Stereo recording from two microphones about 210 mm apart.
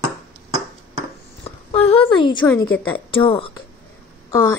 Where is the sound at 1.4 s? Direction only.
25° left (ahead or behind).